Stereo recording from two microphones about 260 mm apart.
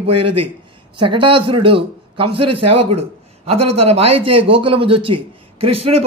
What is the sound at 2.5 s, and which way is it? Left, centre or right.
Speech, right.